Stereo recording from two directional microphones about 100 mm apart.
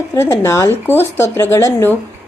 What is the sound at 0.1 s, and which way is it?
Speech, 25° left (ahead or behind).